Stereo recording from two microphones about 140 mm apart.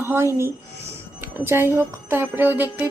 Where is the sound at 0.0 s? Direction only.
20° right (ahead or behind).